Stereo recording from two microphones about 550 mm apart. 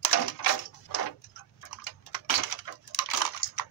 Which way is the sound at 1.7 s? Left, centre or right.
Left.